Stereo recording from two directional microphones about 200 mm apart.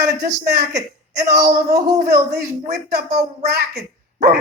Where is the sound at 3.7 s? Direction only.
50° right (ahead or behind).